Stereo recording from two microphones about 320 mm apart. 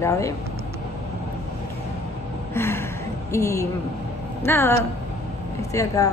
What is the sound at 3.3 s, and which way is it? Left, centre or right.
A woman's voice, centre.